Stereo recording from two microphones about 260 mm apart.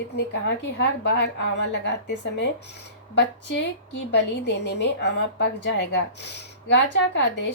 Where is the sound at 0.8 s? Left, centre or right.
Left.